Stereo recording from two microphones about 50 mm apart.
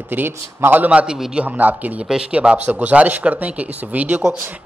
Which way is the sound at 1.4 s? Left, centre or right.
Right.